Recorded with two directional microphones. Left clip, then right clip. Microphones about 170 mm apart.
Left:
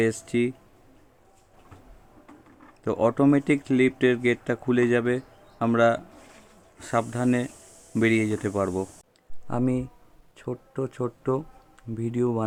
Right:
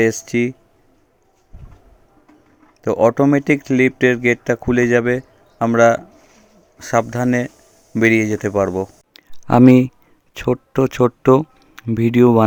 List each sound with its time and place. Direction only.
0.0 s speech: 35° right (ahead or behind)
2.8 s speech: 30° right (ahead or behind)
9.1 s a sound: 55° right (ahead or behind)
10.3 s speech: 60° right (ahead or behind)